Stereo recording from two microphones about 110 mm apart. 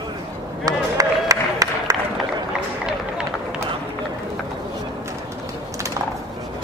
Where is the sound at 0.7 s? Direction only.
30° right (ahead or behind).